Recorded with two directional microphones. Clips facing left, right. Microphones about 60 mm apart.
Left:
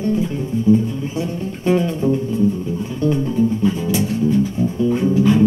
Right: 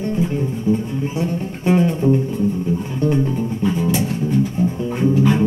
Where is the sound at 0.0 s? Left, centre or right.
Right.